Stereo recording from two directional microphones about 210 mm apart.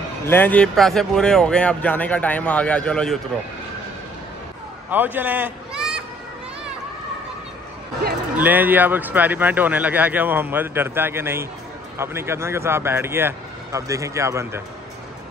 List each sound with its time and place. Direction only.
0.3 s speech: 10° left (ahead or behind)
4.8 s speech: 10° right (ahead or behind)
8.4 s speech: 10° right (ahead or behind)